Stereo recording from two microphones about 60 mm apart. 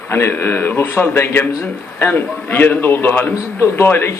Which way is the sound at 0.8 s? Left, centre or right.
Left.